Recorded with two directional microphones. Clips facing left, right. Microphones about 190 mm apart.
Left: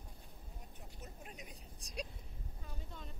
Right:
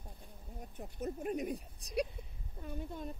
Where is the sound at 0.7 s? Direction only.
50° right (ahead or behind).